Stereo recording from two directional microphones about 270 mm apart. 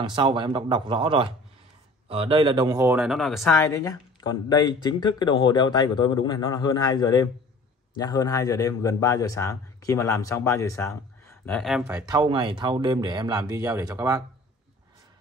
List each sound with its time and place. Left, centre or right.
0.0 s speech: centre
3.5 s speech: centre
12.1 s speech: centre